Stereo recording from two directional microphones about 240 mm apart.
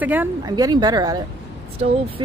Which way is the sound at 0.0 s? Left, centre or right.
Centre.